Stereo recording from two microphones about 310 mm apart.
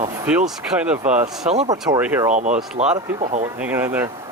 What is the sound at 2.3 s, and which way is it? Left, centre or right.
Speech, right.